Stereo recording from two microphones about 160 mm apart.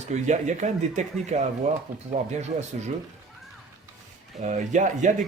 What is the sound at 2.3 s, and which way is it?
Speech, 45° right (ahead or behind).